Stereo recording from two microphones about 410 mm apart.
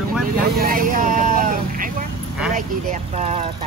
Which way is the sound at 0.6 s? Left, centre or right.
Centre.